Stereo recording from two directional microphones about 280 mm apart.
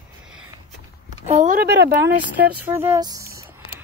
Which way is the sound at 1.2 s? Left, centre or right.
Right.